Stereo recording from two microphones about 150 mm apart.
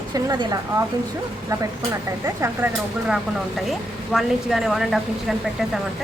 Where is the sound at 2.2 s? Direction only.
15° right (ahead or behind).